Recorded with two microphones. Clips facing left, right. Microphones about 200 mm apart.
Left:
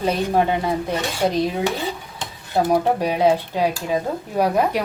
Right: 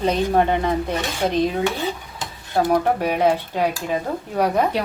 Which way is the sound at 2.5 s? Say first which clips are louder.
Even; 10° left (ahead or behind).